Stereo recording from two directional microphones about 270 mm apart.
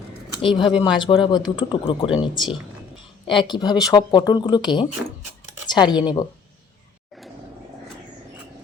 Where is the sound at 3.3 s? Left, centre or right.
Centre.